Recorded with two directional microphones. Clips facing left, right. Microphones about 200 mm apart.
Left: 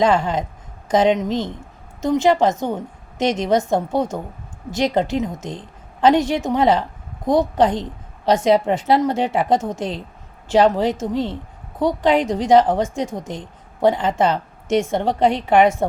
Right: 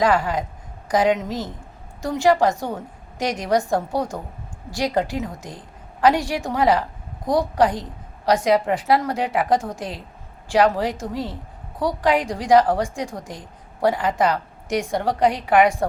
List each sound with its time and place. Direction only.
0.0 s a woman's voice: 25° left (ahead or behind)